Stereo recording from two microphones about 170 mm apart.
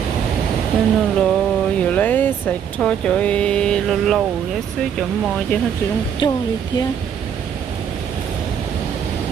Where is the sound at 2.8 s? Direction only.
5° left (ahead or behind).